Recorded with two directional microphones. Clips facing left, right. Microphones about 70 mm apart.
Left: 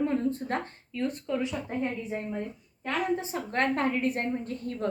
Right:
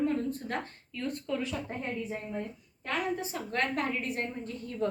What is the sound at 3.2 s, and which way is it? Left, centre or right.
A woman's voice, left.